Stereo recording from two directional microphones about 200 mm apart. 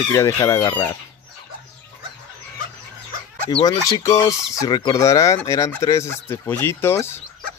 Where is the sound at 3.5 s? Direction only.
20° left (ahead or behind).